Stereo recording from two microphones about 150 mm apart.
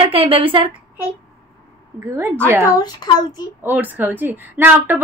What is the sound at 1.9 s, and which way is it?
Speech, 15° right (ahead or behind).